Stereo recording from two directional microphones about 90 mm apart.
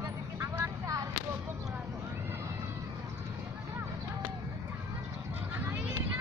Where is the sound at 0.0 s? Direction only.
35° right (ahead or behind).